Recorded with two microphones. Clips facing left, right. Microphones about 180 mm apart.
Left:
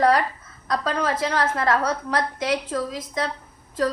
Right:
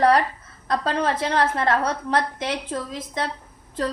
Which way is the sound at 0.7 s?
30° right (ahead or behind).